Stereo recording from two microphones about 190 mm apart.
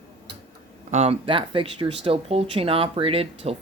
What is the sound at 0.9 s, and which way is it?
Speech, 35° right (ahead or behind).